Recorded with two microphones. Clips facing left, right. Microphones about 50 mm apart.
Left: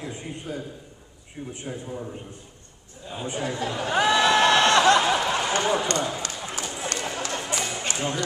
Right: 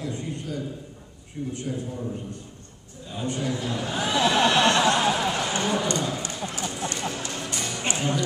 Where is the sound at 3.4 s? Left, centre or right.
Left.